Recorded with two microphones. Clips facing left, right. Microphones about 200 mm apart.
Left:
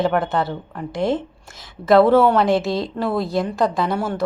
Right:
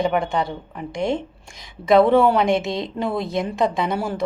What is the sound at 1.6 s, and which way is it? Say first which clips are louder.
A woman's voice: left 1 dB; 15° right (ahead or behind).